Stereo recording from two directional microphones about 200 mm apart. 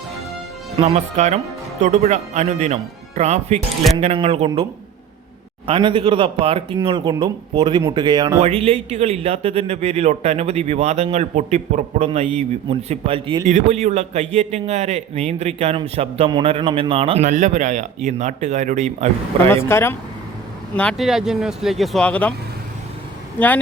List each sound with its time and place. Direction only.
0.8 s speech: 30° right (ahead or behind)
5.6 s speech: 25° right (ahead or behind)
8.4 s speech: 35° right (ahead or behind)
19.6 s speech: 10° left (ahead or behind)